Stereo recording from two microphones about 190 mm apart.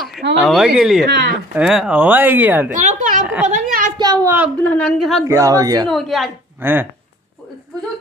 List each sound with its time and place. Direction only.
0.4 s a woman's voice: centre (ahead or behind)
1.0 s speech: 65° right (ahead or behind)
1.6 s speech: centre (ahead or behind)
2.7 s a sound: 40° right (ahead or behind)
4.0 s a sound: 20° right (ahead or behind)
4.6 s a woman's voice: 5° left (ahead or behind)
5.2 s speech: 15° right (ahead or behind)
5.9 s a woman's voice: centre (ahead or behind)
6.6 s speech: 10° right (ahead or behind)